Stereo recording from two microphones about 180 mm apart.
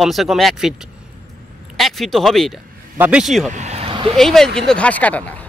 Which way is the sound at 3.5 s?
40° right (ahead or behind).